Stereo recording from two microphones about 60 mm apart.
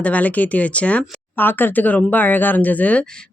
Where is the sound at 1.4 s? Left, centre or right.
Left.